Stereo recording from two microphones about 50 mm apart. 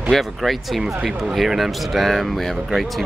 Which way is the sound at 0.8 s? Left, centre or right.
Centre.